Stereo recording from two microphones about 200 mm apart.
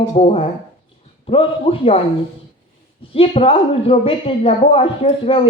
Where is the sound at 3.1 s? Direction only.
30° left (ahead or behind).